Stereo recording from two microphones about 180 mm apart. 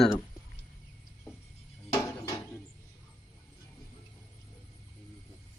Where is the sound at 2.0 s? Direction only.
20° left (ahead or behind).